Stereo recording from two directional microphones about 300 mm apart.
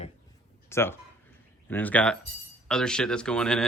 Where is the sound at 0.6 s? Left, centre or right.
Centre.